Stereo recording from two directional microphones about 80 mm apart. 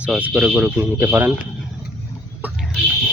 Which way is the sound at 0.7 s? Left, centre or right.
Right.